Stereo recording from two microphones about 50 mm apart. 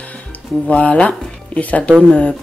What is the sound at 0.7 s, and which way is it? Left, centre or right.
Speech, left.